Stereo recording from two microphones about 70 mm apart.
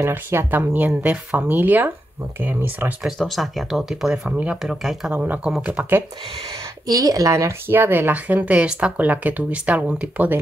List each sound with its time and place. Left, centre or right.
0.0 s speech: right
3.2 s speech: centre
4.4 s speech: right
6.9 s speech: right
7.6 s speech: right